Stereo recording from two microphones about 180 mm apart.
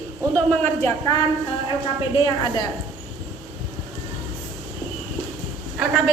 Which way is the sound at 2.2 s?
25° left (ahead or behind).